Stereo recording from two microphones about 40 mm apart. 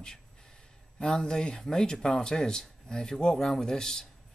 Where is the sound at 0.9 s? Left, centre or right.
Centre.